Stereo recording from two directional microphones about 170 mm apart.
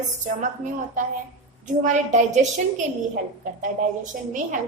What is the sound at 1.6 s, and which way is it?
A woman's voice, 45° right (ahead or behind).